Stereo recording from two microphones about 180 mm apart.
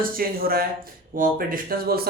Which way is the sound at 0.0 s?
55° right (ahead or behind).